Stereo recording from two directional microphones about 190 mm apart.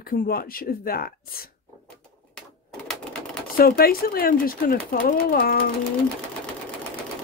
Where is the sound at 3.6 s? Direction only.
50° left (ahead or behind).